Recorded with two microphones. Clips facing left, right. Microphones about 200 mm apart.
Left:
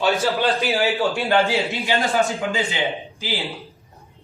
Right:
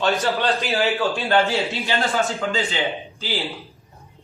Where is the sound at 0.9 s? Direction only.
15° left (ahead or behind).